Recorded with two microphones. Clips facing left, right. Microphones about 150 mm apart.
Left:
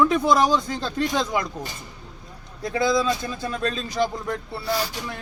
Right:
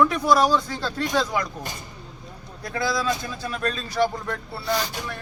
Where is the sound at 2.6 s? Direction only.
20° left (ahead or behind).